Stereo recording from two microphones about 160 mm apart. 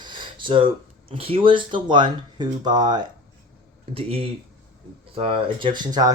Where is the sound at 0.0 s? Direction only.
30° right (ahead or behind).